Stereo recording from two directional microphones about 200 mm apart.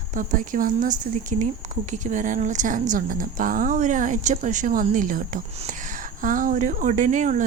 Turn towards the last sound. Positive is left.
turn(degrees=-40)  # may be behind; listen again after turning